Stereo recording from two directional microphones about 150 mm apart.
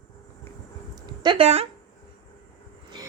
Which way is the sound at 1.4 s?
45° right (ahead or behind).